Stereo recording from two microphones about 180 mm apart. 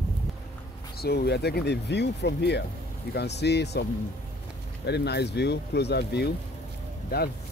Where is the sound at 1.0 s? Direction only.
65° left (ahead or behind).